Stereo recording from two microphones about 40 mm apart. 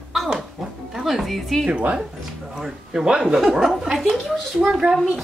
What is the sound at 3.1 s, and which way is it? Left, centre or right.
Speech, right.